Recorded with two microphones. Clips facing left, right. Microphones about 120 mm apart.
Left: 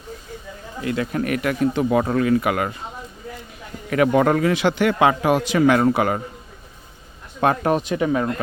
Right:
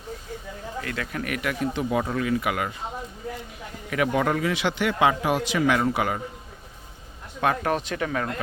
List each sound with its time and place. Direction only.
0.8 s speech: 20° left (ahead or behind); by 2.7 s 45° left (ahead or behind)
3.8 s speech: 45° left (ahead or behind)
7.4 s speech: 35° left (ahead or behind)
7.7 s speech: 10° left (ahead or behind)